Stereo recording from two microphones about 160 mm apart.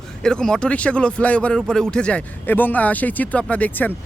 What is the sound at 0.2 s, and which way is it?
Speech, 5° left (ahead or behind).